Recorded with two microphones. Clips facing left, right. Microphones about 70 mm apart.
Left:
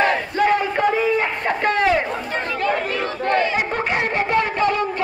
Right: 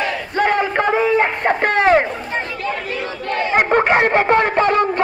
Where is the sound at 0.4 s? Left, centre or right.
Right.